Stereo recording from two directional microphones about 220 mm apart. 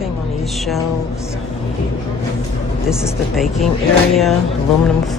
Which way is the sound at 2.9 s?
Centre (ahead or behind).